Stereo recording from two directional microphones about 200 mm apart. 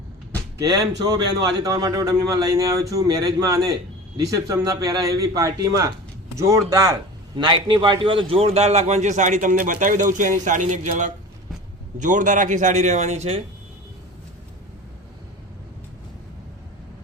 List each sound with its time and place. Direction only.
0.6 s a man's voice: 20° right (ahead or behind)